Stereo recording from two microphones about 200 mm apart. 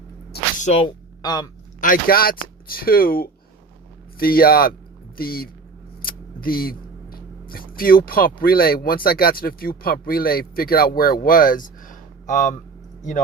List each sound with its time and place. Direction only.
0.6 s speech: 30° left (ahead or behind)
1.2 s a sound: 20° left (ahead or behind)
1.8 s speech: 45° left (ahead or behind)